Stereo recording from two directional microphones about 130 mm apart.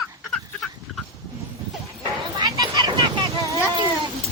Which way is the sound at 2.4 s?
30° right (ahead or behind).